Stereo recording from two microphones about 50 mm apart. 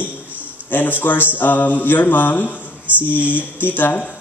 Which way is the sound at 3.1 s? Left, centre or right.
Right.